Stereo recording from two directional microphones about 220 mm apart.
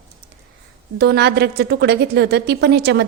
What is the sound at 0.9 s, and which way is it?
A woman's voice, 50° right (ahead or behind).